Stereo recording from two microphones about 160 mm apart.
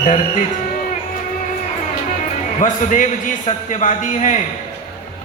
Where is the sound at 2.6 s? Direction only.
55° left (ahead or behind).